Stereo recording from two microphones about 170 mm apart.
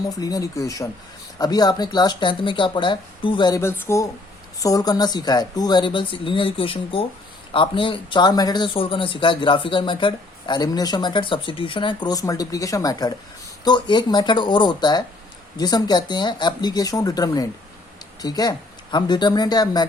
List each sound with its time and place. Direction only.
0.2 s speech: 20° left (ahead or behind)